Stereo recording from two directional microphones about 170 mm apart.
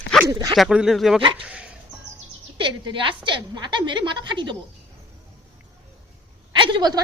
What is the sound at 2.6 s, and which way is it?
A woman's voice, 30° right (ahead or behind).